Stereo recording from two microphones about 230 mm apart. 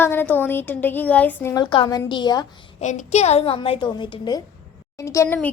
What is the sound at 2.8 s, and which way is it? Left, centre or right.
A woman's voice, left.